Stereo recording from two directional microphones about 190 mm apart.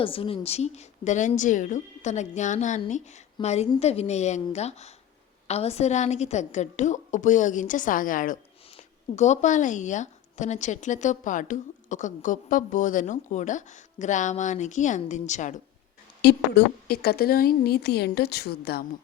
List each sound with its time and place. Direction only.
0.0 s speech: 30° left (ahead or behind)
16.2 s a woman's voice: 55° left (ahead or behind)